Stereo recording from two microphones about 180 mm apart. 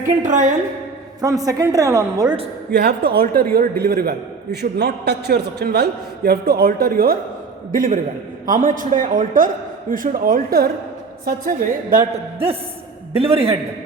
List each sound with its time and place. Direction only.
0.2 s a man's voice: 45° right (ahead or behind)
1.2 s a woman's voice: 20° right (ahead or behind)
2.7 s a man's voice: 65° right (ahead or behind); by 12.0 s 50° right (ahead or behind)
13.1 s a man's voice: 35° right (ahead or behind)